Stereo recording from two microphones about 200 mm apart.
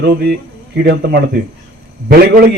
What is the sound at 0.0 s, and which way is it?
A man's voice, 55° right (ahead or behind).